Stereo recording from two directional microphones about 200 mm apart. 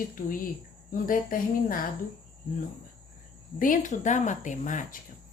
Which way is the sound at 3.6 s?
40° left (ahead or behind).